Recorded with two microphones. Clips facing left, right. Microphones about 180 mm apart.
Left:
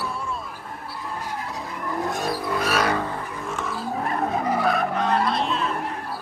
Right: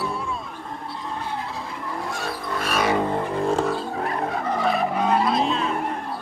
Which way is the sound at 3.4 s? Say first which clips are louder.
Right 10 dB; 30° right (ahead or behind).